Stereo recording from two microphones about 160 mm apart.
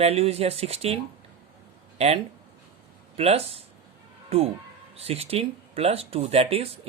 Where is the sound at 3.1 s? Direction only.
40° right (ahead or behind).